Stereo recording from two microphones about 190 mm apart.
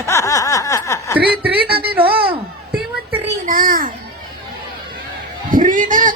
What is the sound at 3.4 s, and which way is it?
Speech, 45° right (ahead or behind).